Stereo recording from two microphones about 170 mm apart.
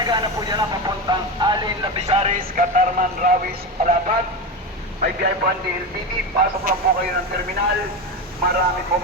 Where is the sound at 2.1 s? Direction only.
35° right (ahead or behind).